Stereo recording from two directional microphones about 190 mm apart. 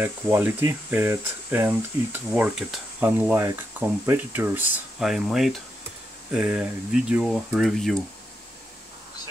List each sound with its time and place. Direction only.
0.0 s speech: 10° right (ahead or behind)